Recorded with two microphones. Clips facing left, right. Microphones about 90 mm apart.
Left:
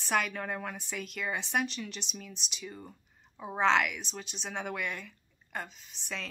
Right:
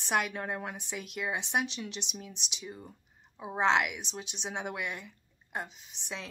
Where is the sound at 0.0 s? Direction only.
15° right (ahead or behind).